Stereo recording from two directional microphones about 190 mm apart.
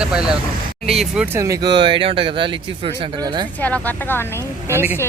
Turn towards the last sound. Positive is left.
turn(degrees=-10)  # may be behind; listen again after turning